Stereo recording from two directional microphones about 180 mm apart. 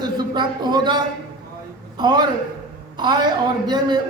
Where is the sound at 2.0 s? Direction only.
25° right (ahead or behind).